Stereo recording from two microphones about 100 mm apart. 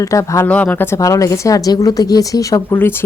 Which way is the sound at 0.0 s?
30° left (ahead or behind).